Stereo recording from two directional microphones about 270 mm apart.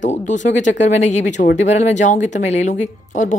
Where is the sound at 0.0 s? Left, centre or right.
Left.